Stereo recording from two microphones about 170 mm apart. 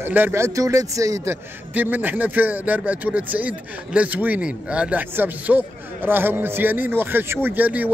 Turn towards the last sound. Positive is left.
turn(degrees=-10)  # may be behind; listen again after turning